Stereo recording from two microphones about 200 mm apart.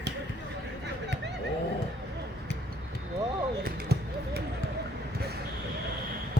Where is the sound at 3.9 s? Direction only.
55° right (ahead or behind).